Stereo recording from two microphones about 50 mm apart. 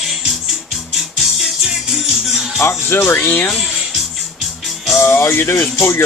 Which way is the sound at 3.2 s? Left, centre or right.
Left.